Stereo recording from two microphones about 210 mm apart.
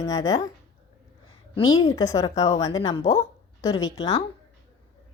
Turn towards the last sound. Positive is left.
turn(degrees=15)  # may be behind; listen again after turning